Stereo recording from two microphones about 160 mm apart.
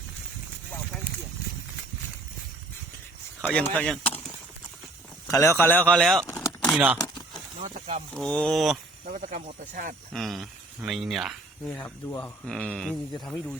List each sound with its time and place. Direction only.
3.5 s speech: 5° left (ahead or behind)
5.3 s speech: 15° left (ahead or behind)
6.2 s a sound: 10° left (ahead or behind)
6.7 s speech: 10° right (ahead or behind)
7.6 s a sound: 45° right (ahead or behind)
8.1 s speech: 5° left (ahead or behind)
9.3 s speech: 55° right (ahead or behind)
10.1 s speech: centre (ahead or behind)